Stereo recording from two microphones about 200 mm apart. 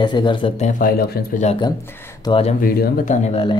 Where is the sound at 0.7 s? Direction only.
45° left (ahead or behind).